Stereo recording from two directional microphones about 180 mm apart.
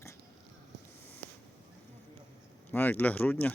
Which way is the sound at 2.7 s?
10° left (ahead or behind).